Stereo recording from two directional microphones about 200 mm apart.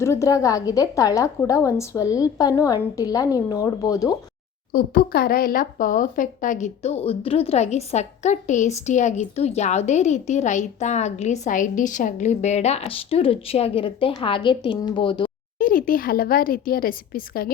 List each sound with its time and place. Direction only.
0.0 s a woman's voice: 15° left (ahead or behind)
4.7 s a woman's voice: 50° left (ahead or behind); by 15.3 s 25° left (ahead or behind)
15.5 s speech: 45° left (ahead or behind)